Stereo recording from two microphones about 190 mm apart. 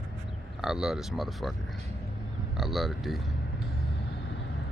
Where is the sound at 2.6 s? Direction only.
Centre (ahead or behind).